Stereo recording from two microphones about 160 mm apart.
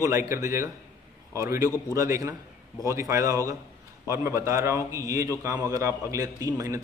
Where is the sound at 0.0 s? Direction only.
20° right (ahead or behind).